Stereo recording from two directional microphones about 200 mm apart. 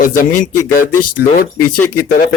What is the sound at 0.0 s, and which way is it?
Speech, 40° left (ahead or behind).